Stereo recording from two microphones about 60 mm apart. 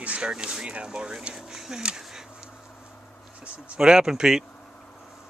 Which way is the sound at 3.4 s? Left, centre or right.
Centre.